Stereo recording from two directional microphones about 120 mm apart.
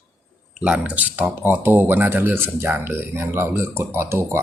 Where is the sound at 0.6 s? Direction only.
10° right (ahead or behind).